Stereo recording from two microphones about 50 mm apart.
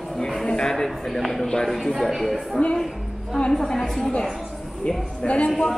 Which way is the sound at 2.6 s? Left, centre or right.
Left.